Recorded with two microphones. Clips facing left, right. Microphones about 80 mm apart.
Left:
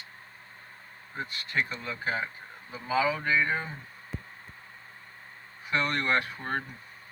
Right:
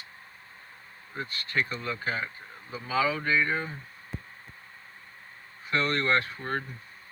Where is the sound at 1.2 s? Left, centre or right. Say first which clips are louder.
Right 1 dB; centre.